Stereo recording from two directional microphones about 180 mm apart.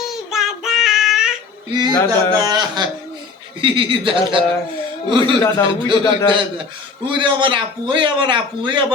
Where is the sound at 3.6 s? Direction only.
30° right (ahead or behind).